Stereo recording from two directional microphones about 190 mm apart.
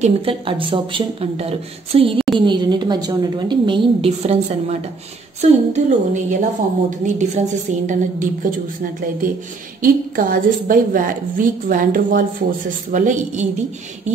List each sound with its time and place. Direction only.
0.0 s a woman's voice: 30° right (ahead or behind)
9.8 s a woman's voice: 45° right (ahead or behind)